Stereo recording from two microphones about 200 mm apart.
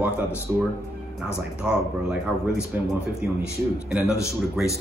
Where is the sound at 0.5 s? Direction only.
10° right (ahead or behind).